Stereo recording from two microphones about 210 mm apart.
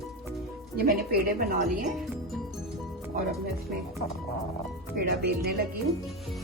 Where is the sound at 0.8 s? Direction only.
45° right (ahead or behind).